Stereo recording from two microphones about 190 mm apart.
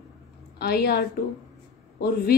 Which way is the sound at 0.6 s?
55° left (ahead or behind).